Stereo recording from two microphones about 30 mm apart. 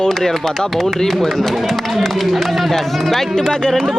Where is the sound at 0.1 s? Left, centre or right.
Centre.